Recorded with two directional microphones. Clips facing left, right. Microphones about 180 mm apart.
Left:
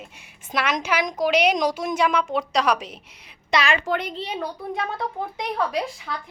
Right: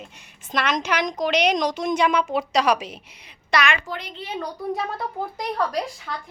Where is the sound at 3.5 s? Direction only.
30° left (ahead or behind).